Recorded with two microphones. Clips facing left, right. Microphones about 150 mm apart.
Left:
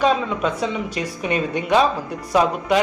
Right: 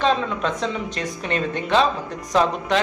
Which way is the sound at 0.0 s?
10° left (ahead or behind).